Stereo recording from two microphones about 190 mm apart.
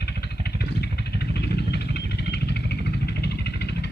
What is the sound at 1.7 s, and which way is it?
Vehicle, 60° left (ahead or behind).